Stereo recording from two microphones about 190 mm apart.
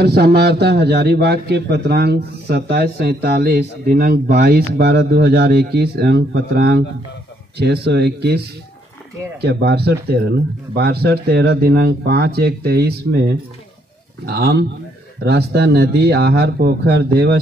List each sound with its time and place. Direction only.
0.0 s a man's voice: 60° right (ahead or behind)
9.4 s a man's voice: 60° right (ahead or behind)